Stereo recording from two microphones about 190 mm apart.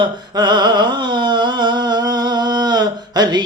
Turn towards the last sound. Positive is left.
turn(degrees=-20)  # may be behind; listen again after turning